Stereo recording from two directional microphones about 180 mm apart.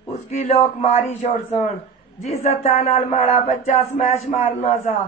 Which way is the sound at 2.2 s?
35° left (ahead or behind).